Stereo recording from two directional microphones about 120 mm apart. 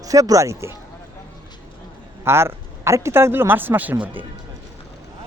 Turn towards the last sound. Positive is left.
turn(degrees=-15)  # may be behind; listen again after turning